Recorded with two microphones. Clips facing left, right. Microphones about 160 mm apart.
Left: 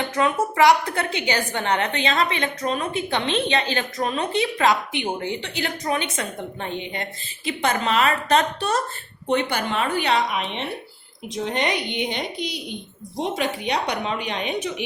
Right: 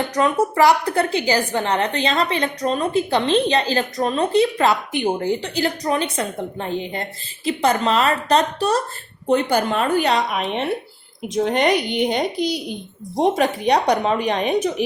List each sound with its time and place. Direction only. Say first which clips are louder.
0.2 s a woman's voice: right 2 dB; 35° right (ahead or behind)